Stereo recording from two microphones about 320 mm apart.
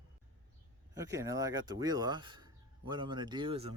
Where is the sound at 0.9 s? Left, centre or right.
Centre.